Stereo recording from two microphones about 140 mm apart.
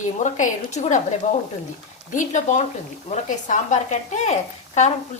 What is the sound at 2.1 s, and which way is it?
Speech, 60° left (ahead or behind).